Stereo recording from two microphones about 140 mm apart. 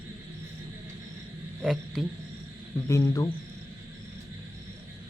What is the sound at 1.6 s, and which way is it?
Speech, centre (ahead or behind).